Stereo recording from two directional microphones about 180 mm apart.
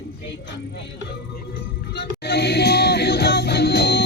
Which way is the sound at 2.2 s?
65° left (ahead or behind).